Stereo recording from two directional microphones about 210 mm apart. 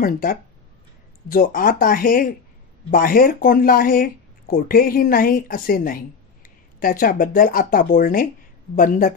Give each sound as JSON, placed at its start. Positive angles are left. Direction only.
{"t": 0.0, "sound": "speech", "side_deg": 45}